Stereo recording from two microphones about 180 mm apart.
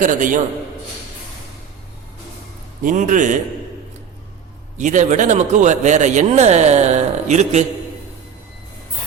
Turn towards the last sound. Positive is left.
turn(degrees=-40)  # may be behind; listen again after turning